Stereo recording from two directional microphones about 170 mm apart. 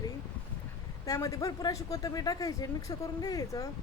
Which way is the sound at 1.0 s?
20° left (ahead or behind).